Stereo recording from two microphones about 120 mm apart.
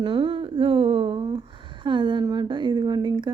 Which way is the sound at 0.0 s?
45° right (ahead or behind).